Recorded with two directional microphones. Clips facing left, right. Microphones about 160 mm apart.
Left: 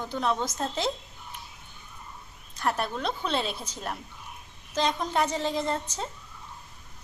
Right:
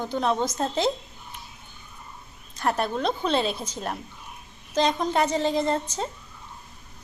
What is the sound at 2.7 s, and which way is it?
Speech, 30° right (ahead or behind).